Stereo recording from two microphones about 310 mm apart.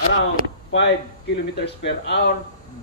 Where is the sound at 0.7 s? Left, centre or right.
Left.